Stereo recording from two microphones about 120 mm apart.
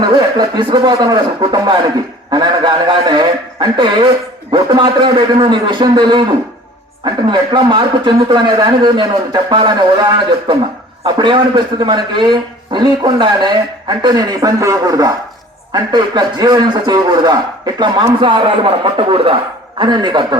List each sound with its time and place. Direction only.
0.0 s a man's voice: 40° right (ahead or behind)
19.8 s a man's voice: 40° right (ahead or behind)